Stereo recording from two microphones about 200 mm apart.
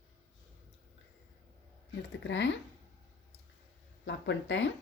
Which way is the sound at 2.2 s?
65° left (ahead or behind).